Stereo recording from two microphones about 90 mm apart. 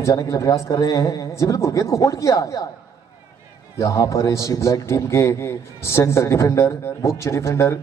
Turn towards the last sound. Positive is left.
turn(degrees=35)  # may be behind; listen again after turning